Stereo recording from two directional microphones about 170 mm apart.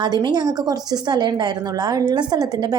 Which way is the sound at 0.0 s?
25° right (ahead or behind).